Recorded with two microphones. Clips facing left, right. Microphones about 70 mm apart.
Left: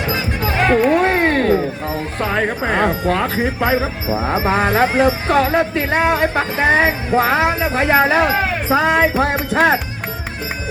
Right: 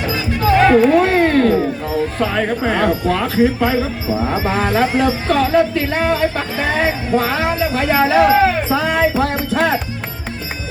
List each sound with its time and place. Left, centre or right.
0.1 s music: left
2.6 s speech: left